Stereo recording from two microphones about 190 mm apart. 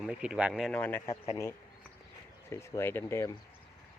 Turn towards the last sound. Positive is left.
turn(degrees=10)  # may be behind; listen again after turning